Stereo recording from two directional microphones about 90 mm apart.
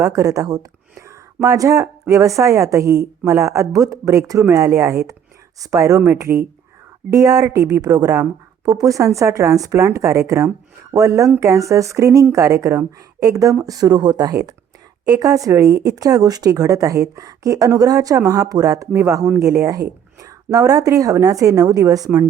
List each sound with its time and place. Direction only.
0.0 s a woman's voice: 40° right (ahead or behind)